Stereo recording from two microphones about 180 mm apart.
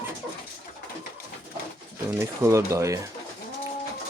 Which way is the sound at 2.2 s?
15° right (ahead or behind).